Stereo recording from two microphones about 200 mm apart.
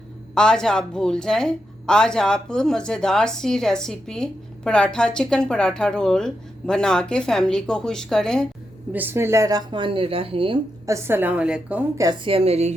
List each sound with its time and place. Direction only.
0.3 s speech: 5° left (ahead or behind)
8.9 s a woman's voice: 10° right (ahead or behind); by 10.6 s 25° right (ahead or behind)
10.8 s a woman's voice: 15° right (ahead or behind); by 12.7 s 30° right (ahead or behind)